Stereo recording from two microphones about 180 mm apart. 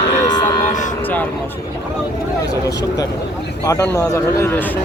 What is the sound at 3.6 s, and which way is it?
Speech, 20° left (ahead or behind).